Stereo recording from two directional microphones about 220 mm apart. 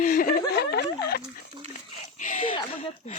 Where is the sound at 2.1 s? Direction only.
35° left (ahead or behind).